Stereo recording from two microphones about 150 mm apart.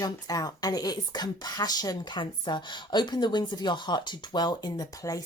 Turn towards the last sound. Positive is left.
turn(degrees=25)  # may be behind; listen again after turning